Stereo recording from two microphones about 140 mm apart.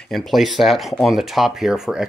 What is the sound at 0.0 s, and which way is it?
Speech, centre (ahead or behind).